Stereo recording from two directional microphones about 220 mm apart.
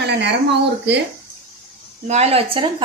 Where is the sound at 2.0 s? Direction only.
30° right (ahead or behind).